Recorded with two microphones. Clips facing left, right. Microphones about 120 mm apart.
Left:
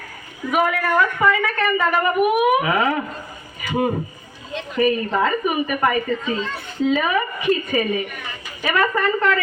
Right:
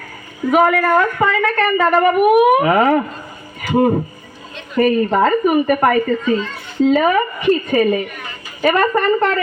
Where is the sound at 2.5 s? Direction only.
45° right (ahead or behind).